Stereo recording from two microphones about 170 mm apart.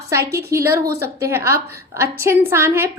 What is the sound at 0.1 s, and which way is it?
Speech, 15° right (ahead or behind).